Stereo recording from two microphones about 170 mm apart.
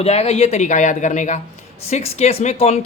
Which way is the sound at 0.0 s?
40° left (ahead or behind).